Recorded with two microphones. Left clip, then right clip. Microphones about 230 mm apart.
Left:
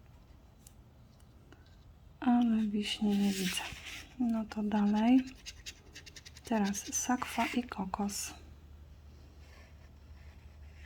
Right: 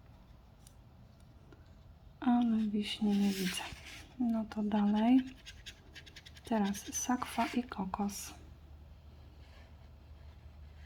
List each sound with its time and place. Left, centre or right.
2.1 s speech: centre
6.5 s speech: centre